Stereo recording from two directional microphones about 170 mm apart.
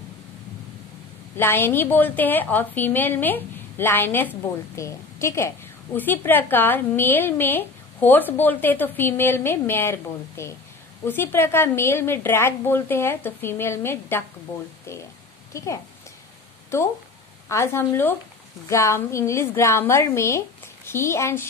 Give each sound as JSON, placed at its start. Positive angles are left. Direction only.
{"t": 1.3, "sound": "a woman's voice", "side_deg": 15}